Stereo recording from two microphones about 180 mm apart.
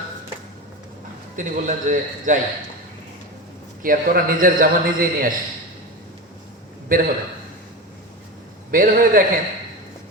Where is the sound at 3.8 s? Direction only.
50° right (ahead or behind).